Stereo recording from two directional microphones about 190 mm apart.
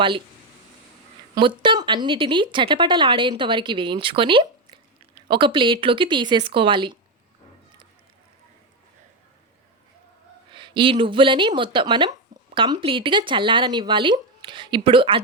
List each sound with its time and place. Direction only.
1.4 s speech: 25° right (ahead or behind)
10.5 s speech: 25° right (ahead or behind)